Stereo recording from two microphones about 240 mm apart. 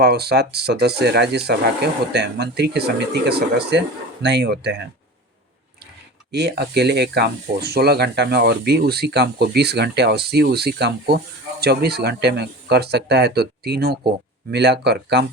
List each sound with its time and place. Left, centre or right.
0.0 s speech: right
6.3 s speech: right